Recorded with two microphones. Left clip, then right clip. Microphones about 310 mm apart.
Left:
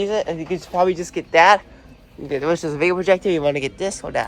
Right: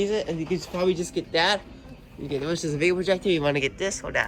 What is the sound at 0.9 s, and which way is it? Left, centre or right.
Speech, left.